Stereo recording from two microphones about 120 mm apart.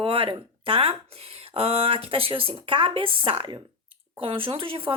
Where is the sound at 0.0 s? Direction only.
50° right (ahead or behind).